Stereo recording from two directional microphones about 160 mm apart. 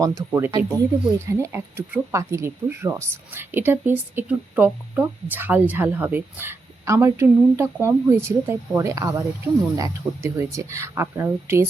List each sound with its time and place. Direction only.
0.0 s speech: 20° right (ahead or behind)